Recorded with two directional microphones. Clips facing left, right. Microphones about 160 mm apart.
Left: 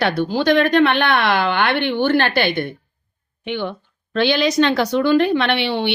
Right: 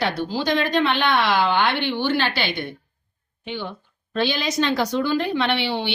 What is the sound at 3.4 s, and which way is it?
A woman's voice, 70° left (ahead or behind).